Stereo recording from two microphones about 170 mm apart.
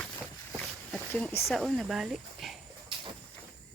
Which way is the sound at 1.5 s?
Centre (ahead or behind).